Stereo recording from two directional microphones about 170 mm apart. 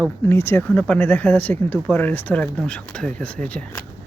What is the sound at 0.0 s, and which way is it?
Speech, 15° left (ahead or behind).